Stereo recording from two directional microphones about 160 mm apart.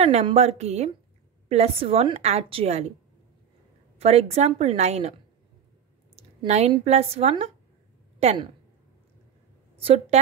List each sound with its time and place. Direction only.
0.0 s a woman's voice: 40° right (ahead or behind)
4.0 s a woman's voice: 40° right (ahead or behind)
6.1 s a sound: 40° right (ahead or behind)
6.8 s a woman's voice: 40° right (ahead or behind)
9.8 s a woman's voice: 40° right (ahead or behind)